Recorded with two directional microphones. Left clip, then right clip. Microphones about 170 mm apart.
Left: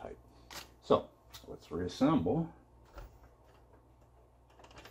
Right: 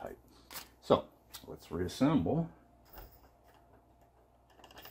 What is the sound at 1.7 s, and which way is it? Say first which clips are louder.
Speech: even; 55° right (ahead or behind).